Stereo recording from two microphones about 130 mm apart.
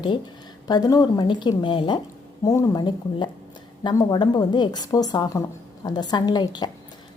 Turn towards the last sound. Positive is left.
turn(degrees=35)  # may be behind; listen again after turning